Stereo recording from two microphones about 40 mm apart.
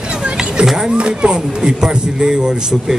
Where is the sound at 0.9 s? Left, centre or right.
Right.